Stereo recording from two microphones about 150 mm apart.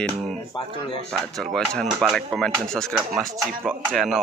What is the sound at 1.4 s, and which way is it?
Speech, 5° left (ahead or behind).